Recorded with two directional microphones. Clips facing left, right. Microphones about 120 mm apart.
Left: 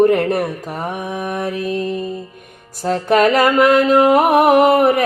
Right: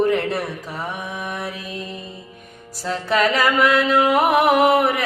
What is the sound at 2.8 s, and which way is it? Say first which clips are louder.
Music: left 6 dB; 50° left (ahead or behind).